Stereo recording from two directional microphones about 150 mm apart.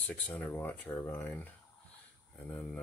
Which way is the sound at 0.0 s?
10° left (ahead or behind).